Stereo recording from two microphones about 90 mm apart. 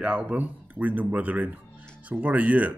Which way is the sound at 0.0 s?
15° right (ahead or behind).